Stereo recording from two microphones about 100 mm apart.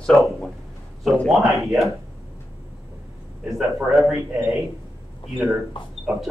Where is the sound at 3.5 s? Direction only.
5° right (ahead or behind).